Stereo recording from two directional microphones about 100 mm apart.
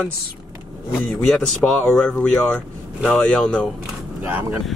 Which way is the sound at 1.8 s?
10° left (ahead or behind).